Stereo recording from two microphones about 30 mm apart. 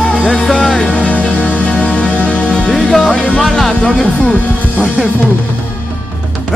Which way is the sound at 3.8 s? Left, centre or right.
Left.